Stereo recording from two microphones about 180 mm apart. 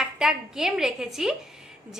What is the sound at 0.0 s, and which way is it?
A woman's voice, 5° right (ahead or behind).